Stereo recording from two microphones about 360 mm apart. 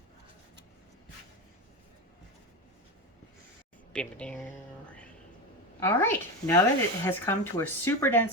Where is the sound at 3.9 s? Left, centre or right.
Centre.